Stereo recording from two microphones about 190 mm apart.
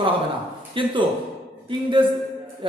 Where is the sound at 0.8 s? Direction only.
25° right (ahead or behind).